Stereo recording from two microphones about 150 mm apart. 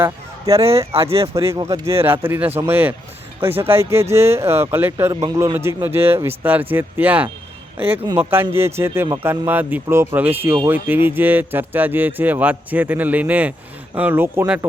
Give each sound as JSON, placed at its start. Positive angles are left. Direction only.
{"t": 0.0, "sound": "fowl", "side_deg": -20}
{"t": 1.2, "sound": "speech", "side_deg": -20}